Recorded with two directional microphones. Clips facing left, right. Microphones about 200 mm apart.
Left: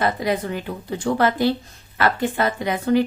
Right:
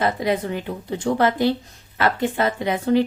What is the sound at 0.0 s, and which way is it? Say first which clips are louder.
A woman's voice: even; 25° right (ahead or behind).